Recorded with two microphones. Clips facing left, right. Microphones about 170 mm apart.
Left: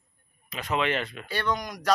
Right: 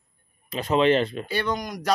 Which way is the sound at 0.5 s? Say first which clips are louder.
Right 8 dB; 30° right (ahead or behind).